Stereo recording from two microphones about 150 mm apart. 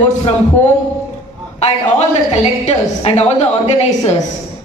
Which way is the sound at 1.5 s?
45° left (ahead or behind).